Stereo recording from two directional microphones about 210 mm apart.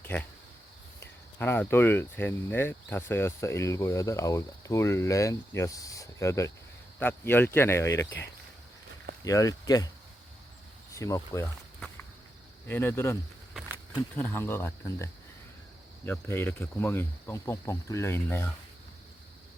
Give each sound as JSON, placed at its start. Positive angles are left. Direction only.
{"t": 0.1, "sound": "speech", "side_deg": 5}
{"t": 9.2, "sound": "speech", "side_deg": 15}
{"t": 10.9, "sound": "speech", "side_deg": 15}
{"t": 12.6, "sound": "speech", "side_deg": 10}
{"t": 13.5, "sound": "a sound", "side_deg": -5}
{"t": 14.2, "sound": "speech", "side_deg": 10}